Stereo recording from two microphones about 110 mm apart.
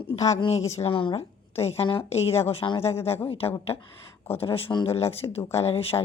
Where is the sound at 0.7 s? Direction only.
65° left (ahead or behind).